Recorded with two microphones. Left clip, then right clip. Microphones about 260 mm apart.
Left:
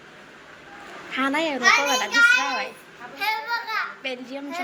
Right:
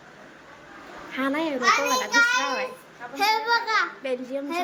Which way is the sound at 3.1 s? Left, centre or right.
Right.